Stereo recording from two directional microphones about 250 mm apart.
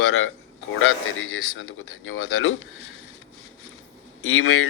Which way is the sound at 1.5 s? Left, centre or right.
Left.